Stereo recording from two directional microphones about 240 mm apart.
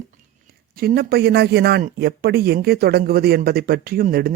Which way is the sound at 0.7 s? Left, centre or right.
Right.